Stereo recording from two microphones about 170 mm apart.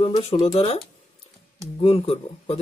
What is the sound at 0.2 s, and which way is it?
Speech, 35° left (ahead or behind).